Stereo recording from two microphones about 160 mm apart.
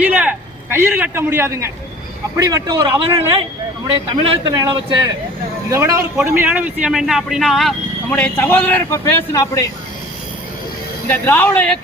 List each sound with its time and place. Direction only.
0.0 s a man's voice: 10° right (ahead or behind); by 4.9 s 30° right (ahead or behind)
5.7 s a man's voice: 15° right (ahead or behind)
8.1 s a man's voice: 15° left (ahead or behind)
11.1 s a man's voice: 10° left (ahead or behind)